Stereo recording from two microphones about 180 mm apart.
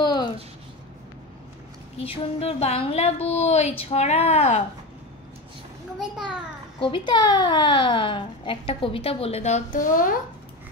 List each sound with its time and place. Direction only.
0.0 s a sound: 25° left (ahead or behind)
2.0 s a woman's voice: 35° left (ahead or behind)
5.9 s a child's voice: 5° right (ahead or behind)
6.8 s a woman's voice: 25° left (ahead or behind); by 10.1 s 50° left (ahead or behind)